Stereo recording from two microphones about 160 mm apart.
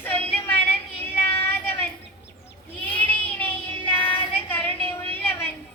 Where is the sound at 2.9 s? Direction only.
10° left (ahead or behind).